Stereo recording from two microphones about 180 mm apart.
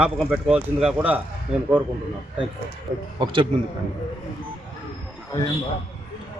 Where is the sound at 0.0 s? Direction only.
5° right (ahead or behind).